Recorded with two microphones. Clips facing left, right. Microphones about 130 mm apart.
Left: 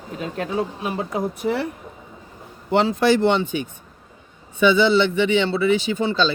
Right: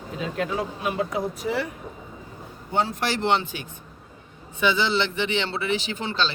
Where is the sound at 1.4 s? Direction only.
60° left (ahead or behind).